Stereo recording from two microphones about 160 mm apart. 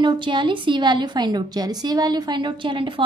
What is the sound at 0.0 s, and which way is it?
A woman's voice, 30° right (ahead or behind).